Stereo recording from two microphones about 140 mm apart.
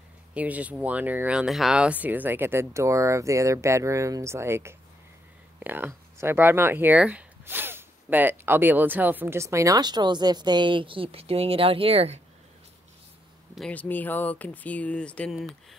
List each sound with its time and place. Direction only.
0.3 s speech: 10° right (ahead or behind); by 12.2 s 45° right (ahead or behind)
13.6 s speech: 10° left (ahead or behind)